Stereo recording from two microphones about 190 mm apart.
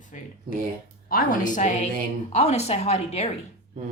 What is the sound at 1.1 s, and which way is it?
A woman's voice, 45° left (ahead or behind).